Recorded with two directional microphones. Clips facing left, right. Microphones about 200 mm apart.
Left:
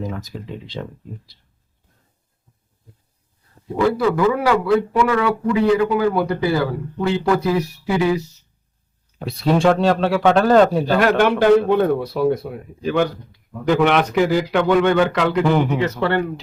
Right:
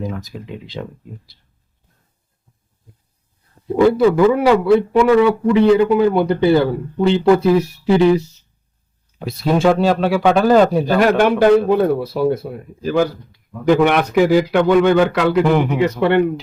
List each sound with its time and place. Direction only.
0.0 s a man's voice: centre (ahead or behind)
3.8 s a man's voice: 25° right (ahead or behind)
9.2 s a man's voice: centre (ahead or behind)